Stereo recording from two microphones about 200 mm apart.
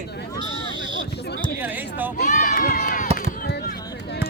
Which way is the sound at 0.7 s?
25° right (ahead or behind).